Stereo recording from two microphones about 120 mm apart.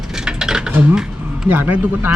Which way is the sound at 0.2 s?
5° right (ahead or behind).